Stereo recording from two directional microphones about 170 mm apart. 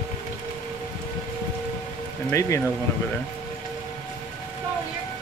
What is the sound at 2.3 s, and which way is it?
Speech, 20° left (ahead or behind).